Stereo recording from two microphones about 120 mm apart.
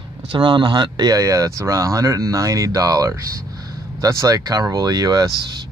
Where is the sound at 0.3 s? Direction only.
40° right (ahead or behind).